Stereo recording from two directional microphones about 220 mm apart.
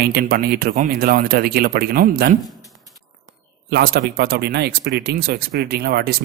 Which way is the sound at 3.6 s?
45° right (ahead or behind).